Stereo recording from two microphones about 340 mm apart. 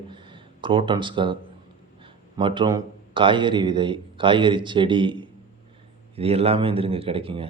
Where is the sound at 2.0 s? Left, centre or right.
Centre.